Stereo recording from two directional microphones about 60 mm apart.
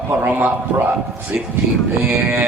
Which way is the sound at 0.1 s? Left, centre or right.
Right.